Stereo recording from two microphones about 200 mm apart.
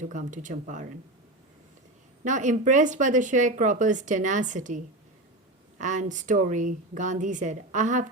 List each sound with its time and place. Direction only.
0.0 s speech: 40° right (ahead or behind)
2.2 s speech: 40° right (ahead or behind)
5.8 s speech: 40° right (ahead or behind)